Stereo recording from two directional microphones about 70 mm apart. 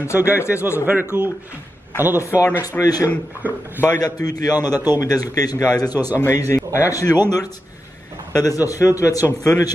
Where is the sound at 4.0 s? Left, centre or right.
Left.